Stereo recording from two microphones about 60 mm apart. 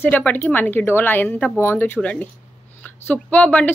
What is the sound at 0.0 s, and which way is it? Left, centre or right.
Speech, left.